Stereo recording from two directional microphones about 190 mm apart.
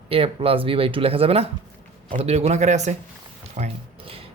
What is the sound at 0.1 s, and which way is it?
Speech, 30° right (ahead or behind).